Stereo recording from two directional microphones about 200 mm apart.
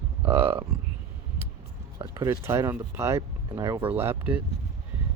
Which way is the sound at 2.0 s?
15° right (ahead or behind).